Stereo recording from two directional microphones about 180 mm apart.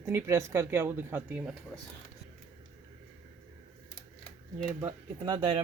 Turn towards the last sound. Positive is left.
turn(degrees=-25)  # may be behind; listen again after turning